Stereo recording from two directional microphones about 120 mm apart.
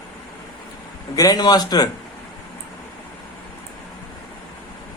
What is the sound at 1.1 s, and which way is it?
Speech, 30° left (ahead or behind).